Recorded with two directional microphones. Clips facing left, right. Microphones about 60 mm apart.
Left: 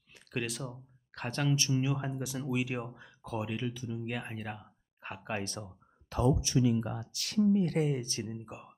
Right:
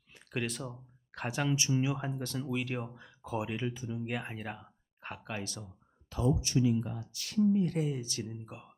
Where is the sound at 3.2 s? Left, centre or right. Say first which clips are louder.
Right 1 dB; centre.